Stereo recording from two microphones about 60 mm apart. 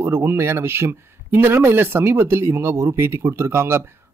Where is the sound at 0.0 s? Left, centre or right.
Right.